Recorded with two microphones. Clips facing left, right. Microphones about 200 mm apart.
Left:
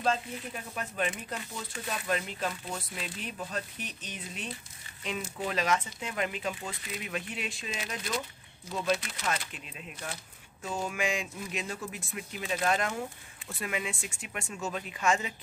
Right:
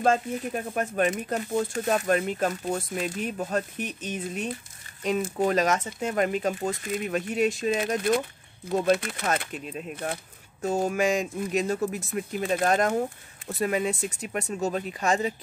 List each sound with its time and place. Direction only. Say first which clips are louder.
0.0 s speech: right 7 dB; 50° right (ahead or behind)